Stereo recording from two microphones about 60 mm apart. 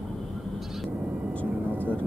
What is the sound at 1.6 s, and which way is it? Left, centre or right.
Vehicle, right.